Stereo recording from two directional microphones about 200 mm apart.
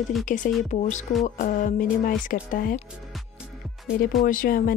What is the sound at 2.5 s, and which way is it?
Speech, 40° left (ahead or behind).